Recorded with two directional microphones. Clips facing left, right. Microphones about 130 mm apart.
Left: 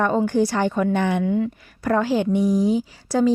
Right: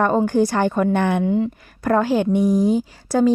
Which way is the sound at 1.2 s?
30° right (ahead or behind).